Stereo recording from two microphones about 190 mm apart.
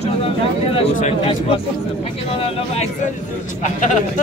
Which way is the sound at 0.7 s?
30° left (ahead or behind).